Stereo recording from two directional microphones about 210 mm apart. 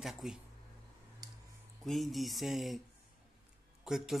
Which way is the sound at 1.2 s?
20° right (ahead or behind).